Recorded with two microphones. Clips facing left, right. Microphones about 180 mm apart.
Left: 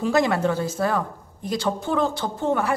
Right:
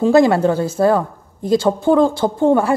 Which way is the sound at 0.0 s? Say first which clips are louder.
Right 8 dB; 30° right (ahead or behind).